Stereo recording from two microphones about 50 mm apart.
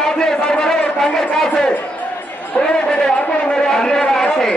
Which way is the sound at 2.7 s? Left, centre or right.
Centre.